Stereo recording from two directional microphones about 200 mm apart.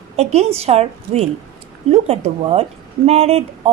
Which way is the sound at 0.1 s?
35° right (ahead or behind).